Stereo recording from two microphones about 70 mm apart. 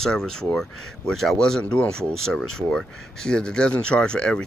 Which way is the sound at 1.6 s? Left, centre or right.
Centre.